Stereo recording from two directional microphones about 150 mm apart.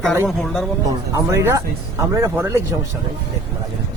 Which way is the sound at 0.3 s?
Centre (ahead or behind).